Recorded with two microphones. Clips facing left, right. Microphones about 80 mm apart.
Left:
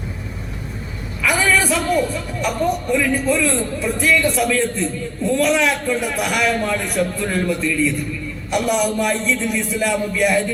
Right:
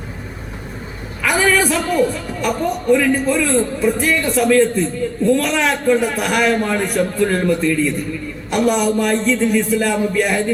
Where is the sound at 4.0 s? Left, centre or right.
Right.